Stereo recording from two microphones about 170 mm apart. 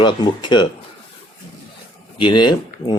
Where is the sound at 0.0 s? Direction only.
25° left (ahead or behind).